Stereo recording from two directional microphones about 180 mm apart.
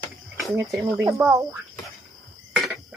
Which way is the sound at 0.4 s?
Centre (ahead or behind).